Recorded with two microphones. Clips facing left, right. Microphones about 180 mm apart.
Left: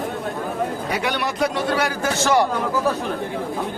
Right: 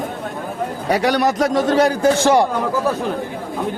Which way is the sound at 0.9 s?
40° right (ahead or behind).